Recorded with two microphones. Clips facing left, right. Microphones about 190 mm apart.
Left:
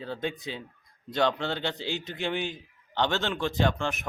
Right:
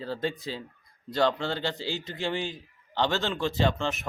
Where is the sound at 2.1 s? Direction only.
15° left (ahead or behind).